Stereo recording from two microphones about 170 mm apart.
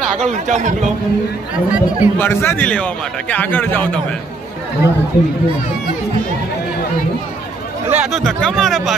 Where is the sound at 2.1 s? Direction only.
10° left (ahead or behind).